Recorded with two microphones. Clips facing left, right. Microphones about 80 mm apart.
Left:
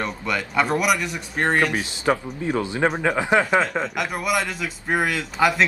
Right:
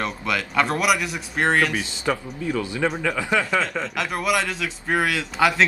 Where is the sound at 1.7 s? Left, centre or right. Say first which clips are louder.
Left 3 dB; left.